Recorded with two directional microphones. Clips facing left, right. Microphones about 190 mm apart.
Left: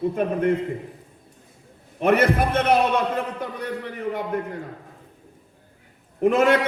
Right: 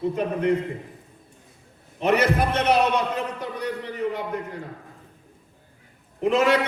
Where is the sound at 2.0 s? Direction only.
55° left (ahead or behind).